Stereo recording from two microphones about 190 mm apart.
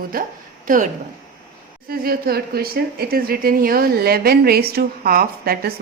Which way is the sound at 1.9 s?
50° right (ahead or behind).